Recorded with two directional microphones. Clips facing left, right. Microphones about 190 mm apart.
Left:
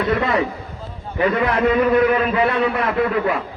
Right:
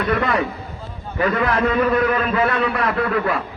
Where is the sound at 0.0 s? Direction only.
25° left (ahead or behind).